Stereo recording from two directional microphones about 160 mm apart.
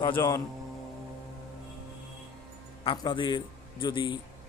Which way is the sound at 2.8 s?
30° left (ahead or behind).